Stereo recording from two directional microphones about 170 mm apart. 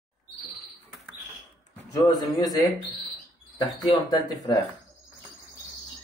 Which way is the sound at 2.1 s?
25° left (ahead or behind).